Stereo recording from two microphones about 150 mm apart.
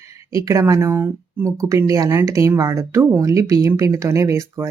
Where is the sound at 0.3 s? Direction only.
20° right (ahead or behind).